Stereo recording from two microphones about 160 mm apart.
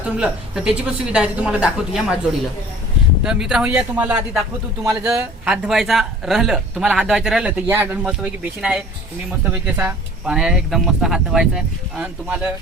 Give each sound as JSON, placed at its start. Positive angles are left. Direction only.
{"t": 0.2, "sound": "a woman's voice", "side_deg": -5}
{"t": 3.2, "sound": "speech", "side_deg": -5}
{"t": 5.0, "sound": "a woman's voice", "side_deg": -15}
{"t": 5.6, "sound": "speech", "side_deg": 0}